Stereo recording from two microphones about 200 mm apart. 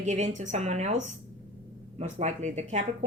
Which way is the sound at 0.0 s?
35° right (ahead or behind).